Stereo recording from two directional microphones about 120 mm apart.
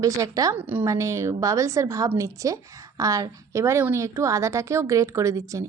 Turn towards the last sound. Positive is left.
turn(degrees=-25)  # may be behind; listen again after turning